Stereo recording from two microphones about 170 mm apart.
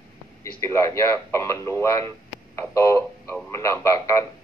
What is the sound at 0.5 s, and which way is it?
Speech, 15° left (ahead or behind).